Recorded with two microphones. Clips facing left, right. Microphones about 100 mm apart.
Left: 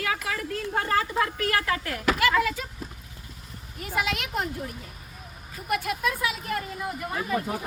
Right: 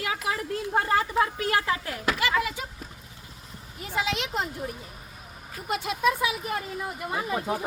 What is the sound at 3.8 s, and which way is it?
Speech, 20° right (ahead or behind).